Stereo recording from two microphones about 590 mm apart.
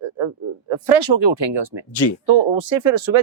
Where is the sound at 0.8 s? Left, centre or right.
Right.